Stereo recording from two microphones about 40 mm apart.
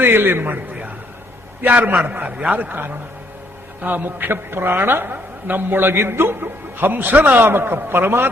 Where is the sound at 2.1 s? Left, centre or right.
Right.